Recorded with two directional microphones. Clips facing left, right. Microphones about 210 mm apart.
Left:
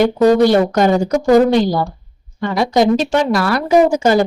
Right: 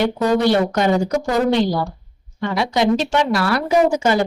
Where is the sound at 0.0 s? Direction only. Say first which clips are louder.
Left 6 dB; 45° left (ahead or behind).